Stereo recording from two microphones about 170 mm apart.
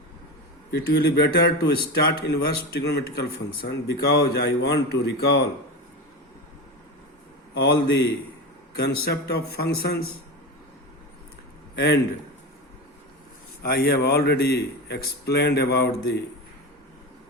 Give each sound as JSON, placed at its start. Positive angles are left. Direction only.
{"t": 0.7, "sound": "speech", "side_deg": 75}
{"t": 7.5, "sound": "a man's voice", "side_deg": 85}
{"t": 13.6, "sound": "speech", "side_deg": 60}